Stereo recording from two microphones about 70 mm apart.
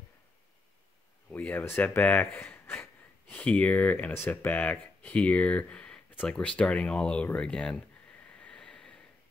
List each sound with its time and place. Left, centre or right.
1.3 s speech: left
8.3 s vehicle: centre